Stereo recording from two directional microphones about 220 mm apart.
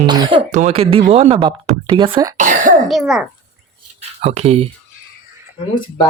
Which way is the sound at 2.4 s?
35° right (ahead or behind).